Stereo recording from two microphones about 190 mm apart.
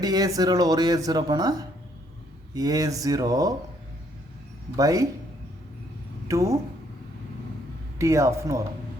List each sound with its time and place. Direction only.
0.0 s speech: 20° right (ahead or behind)
4.8 s speech: 20° right (ahead or behind)
6.2 s a woman's voice: 15° right (ahead or behind)
7.9 s speech: 15° right (ahead or behind)